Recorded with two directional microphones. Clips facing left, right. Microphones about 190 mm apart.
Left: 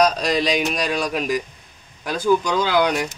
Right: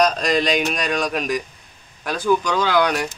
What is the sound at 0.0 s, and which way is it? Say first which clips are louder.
A man's voice: even; 5° left (ahead or behind).